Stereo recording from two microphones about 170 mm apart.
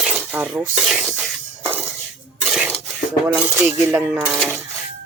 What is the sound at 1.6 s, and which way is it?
Music, 10° right (ahead or behind).